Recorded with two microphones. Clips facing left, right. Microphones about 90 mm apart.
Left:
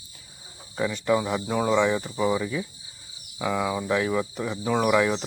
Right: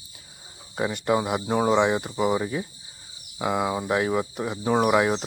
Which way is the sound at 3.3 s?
20° right (ahead or behind).